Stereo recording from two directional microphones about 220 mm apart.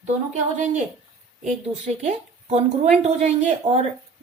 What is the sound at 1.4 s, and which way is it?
A woman's voice, 30° right (ahead or behind).